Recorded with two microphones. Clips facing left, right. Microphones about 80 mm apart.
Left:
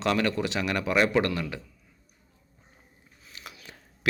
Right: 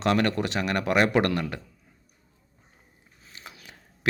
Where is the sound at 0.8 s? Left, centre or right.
Right.